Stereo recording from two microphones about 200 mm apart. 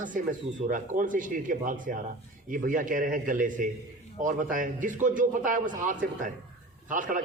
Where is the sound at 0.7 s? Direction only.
40° right (ahead or behind).